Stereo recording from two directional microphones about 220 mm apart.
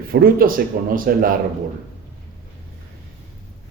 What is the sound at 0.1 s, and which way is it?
A man's voice, 45° right (ahead or behind).